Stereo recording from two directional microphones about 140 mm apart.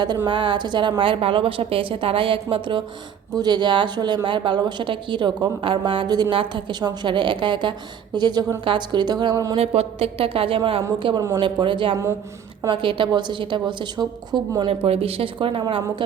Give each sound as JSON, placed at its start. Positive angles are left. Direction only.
{"t": 0.3, "sound": "a woman's voice", "side_deg": -35}
{"t": 9.6, "sound": "a woman's voice", "side_deg": -45}
{"t": 14.8, "sound": "a woman's voice", "side_deg": -45}